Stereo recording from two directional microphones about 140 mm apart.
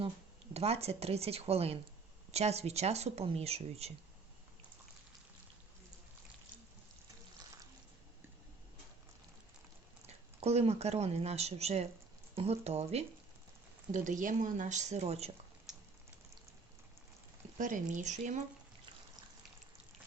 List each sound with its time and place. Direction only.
0.5 s speech: 45° right (ahead or behind)
10.4 s speech: 50° right (ahead or behind)
13.9 s speech: 65° right (ahead or behind); by 15.3 s 50° right (ahead or behind)
15.7 s a sound: 5° right (ahead or behind)
17.6 s speech: 65° right (ahead or behind)